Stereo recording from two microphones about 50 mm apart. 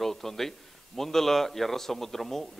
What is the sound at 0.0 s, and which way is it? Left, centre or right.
A man's voice, centre.